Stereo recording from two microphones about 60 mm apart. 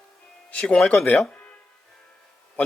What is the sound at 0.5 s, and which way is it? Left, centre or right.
Speech, centre.